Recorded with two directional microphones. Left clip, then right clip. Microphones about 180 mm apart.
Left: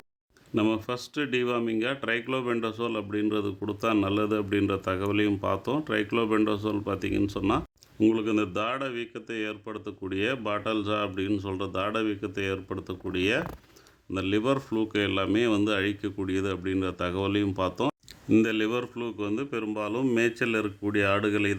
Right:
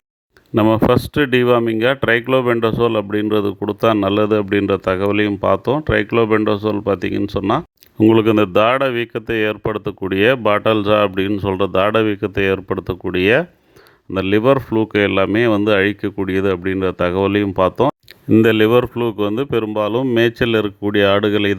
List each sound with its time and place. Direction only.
0.5 s speech: 45° right (ahead or behind)
18.4 s speech: 55° right (ahead or behind)